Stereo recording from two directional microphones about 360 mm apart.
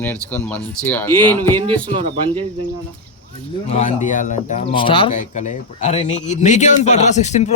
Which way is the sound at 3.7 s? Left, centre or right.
Centre.